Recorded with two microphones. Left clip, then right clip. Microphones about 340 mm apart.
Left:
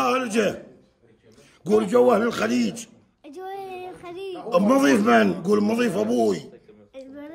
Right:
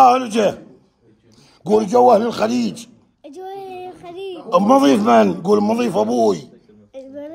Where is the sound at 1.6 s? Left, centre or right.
Centre.